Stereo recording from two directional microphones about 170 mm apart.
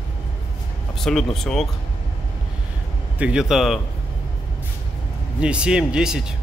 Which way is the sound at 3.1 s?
5° right (ahead or behind).